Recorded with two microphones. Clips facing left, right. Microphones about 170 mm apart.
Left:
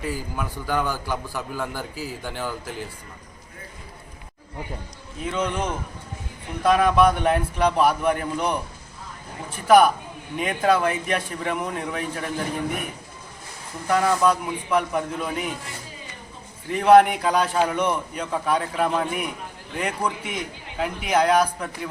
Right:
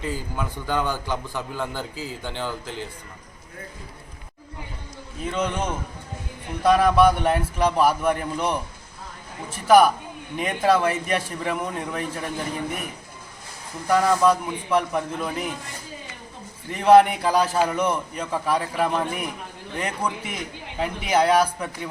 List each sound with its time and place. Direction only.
0.1 s a man's voice: 20° right (ahead or behind)
5.2 s a man's voice: centre (ahead or behind)
9.6 s a man's voice: centre (ahead or behind)
16.7 s a man's voice: centre (ahead or behind)